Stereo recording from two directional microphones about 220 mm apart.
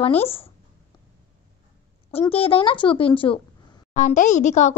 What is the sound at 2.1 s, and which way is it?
A woman's voice, 25° left (ahead or behind).